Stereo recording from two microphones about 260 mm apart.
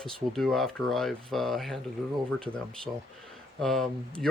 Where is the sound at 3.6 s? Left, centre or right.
Centre.